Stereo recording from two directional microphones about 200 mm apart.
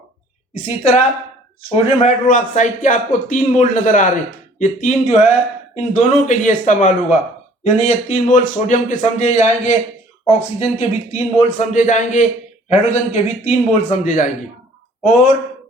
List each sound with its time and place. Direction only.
0.5 s speech: 35° left (ahead or behind)